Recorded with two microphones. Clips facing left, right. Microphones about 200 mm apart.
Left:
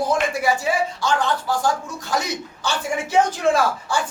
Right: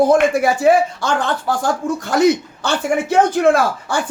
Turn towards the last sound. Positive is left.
turn(degrees=-55)  # may be behind; listen again after turning